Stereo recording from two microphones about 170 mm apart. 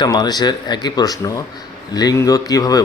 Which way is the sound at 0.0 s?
25° left (ahead or behind).